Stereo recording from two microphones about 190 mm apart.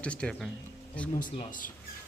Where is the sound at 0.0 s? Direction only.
5° left (ahead or behind).